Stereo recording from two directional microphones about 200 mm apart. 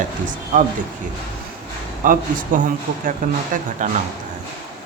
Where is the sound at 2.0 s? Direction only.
40° right (ahead or behind).